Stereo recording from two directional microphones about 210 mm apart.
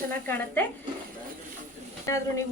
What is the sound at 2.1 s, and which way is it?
Speech, 15° left (ahead or behind).